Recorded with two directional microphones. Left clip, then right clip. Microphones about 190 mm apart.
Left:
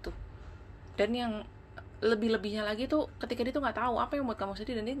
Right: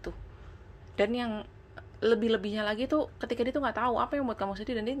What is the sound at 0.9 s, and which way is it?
A woman's voice, 25° right (ahead or behind).